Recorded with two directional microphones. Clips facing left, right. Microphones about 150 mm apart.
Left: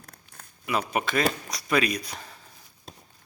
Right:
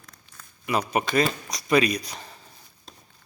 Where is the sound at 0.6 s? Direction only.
Centre (ahead or behind).